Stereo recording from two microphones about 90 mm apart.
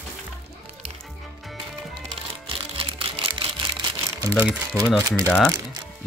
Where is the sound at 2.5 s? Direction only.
90° right; by 4.1 s 65° right (ahead or behind).